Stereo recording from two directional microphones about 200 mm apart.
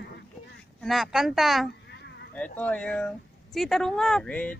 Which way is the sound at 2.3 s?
5° left (ahead or behind).